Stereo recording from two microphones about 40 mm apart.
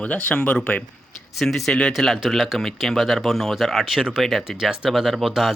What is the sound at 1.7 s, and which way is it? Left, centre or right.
Speech, left.